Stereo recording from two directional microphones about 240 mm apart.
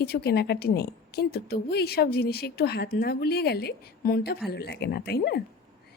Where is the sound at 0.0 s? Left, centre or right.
Left.